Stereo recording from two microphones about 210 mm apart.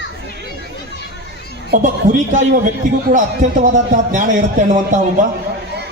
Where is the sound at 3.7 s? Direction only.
35° right (ahead or behind).